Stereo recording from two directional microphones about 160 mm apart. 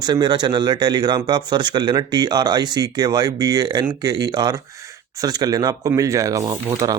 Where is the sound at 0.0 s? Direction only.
25° right (ahead or behind).